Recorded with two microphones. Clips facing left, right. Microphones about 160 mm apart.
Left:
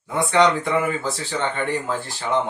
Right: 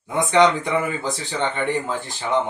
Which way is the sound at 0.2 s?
20° right (ahead or behind).